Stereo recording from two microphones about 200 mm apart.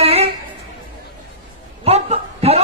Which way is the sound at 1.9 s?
30° right (ahead or behind).